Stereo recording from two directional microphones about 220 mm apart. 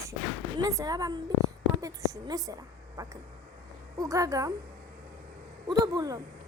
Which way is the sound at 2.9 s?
15° right (ahead or behind).